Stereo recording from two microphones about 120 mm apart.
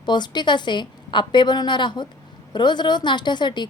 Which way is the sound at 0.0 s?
40° left (ahead or behind).